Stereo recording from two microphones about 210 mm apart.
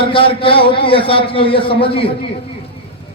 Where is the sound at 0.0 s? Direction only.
25° left (ahead or behind).